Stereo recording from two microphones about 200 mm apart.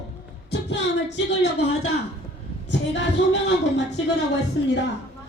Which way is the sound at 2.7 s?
60° left (ahead or behind).